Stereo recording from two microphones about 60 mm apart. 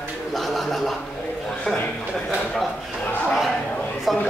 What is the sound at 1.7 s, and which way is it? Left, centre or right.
Speech, centre.